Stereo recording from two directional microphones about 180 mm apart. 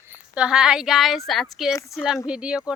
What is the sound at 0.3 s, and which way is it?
Speech, 5° right (ahead or behind).